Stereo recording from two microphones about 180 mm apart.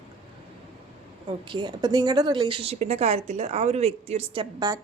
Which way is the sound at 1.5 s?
25° right (ahead or behind).